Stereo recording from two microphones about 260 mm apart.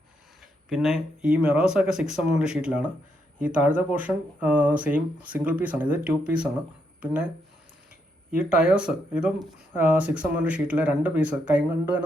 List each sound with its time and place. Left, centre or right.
0.7 s speech: centre
8.3 s speech: centre